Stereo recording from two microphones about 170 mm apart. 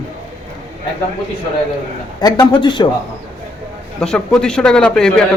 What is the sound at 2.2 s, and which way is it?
Speech, 25° left (ahead or behind).